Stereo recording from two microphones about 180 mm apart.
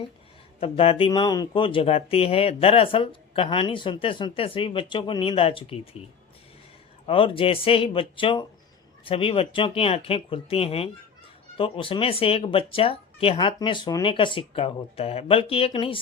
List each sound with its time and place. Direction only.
0.6 s speech: 30° left (ahead or behind)
7.1 s speech: 30° left (ahead or behind)